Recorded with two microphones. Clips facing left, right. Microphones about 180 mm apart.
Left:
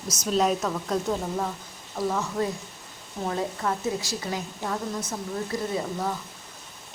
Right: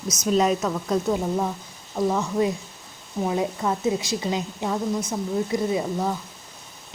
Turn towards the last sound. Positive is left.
turn(degrees=-15)  # may be behind; listen again after turning